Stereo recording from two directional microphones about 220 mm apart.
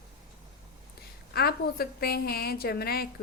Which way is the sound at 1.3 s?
45° left (ahead or behind).